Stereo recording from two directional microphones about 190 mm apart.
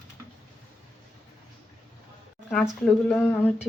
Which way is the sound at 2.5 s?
5° left (ahead or behind).